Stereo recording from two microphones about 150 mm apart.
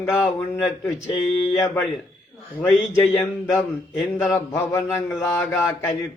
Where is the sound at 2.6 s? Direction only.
10° left (ahead or behind).